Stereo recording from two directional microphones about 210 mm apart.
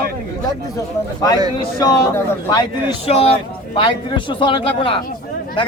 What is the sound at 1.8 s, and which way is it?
Speech, 20° left (ahead or behind).